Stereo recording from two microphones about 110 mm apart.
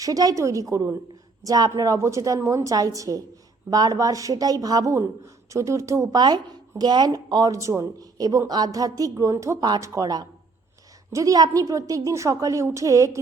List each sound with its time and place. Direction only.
0.0 s a woman's voice: 35° right (ahead or behind)